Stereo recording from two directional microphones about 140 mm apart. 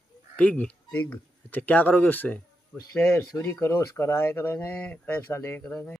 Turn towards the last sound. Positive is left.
turn(degrees=20)  # may be behind; listen again after turning